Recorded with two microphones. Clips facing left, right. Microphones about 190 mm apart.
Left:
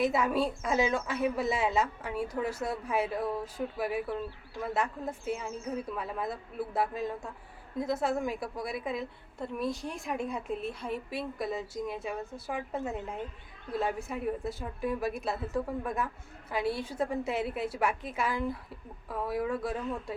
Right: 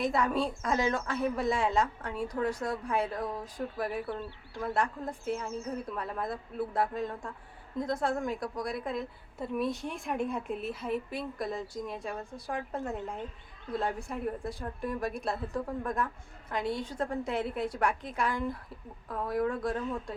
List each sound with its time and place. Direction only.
0.0 s a woman's voice: 5° left (ahead or behind)